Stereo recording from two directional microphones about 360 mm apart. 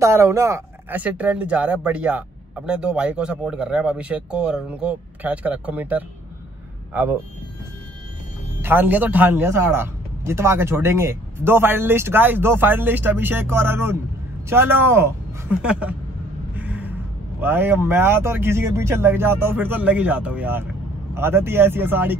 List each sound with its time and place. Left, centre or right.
0.0 s speech: centre
8.5 s speech: centre
16.5 s a sound: centre
17.4 s speech: centre